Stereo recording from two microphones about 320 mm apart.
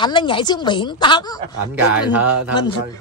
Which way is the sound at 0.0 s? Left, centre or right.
Centre.